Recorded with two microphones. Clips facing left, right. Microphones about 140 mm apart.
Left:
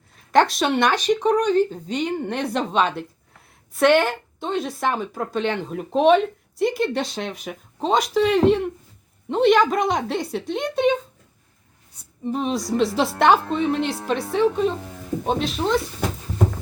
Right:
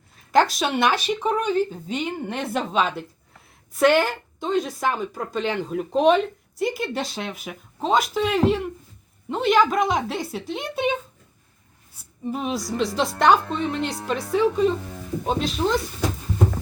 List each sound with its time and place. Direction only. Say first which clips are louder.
0.3 s speech: left 2 dB; centre (ahead or behind)
12.2 s speech: left 3 dB; 5° right (ahead or behind)